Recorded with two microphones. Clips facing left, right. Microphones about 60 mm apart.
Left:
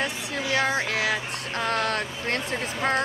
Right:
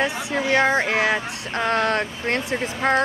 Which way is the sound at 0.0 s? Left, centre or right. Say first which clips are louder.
Right 6 dB; right.